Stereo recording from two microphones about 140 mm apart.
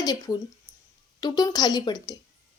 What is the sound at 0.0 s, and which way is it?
A woman's voice, 25° left (ahead or behind).